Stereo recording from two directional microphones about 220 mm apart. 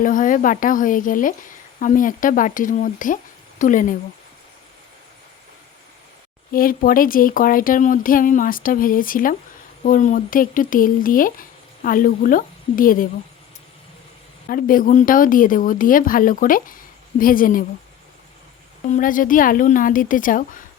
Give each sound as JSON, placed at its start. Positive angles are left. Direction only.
{"t": 0.0, "sound": "speech", "side_deg": 35}
{"t": 6.5, "sound": "speech", "side_deg": 40}
{"t": 14.5, "sound": "speech", "side_deg": 40}
{"t": 18.9, "sound": "speech", "side_deg": 35}